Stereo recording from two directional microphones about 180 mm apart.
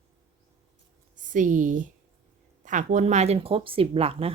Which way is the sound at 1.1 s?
45° right (ahead or behind).